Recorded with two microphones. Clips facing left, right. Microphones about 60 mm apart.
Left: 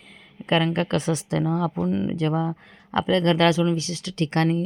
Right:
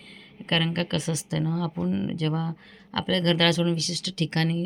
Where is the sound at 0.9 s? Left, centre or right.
Left.